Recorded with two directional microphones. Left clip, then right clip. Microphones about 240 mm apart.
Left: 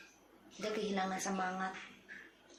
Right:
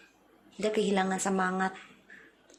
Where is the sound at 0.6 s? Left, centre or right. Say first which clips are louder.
Right 9 dB; right.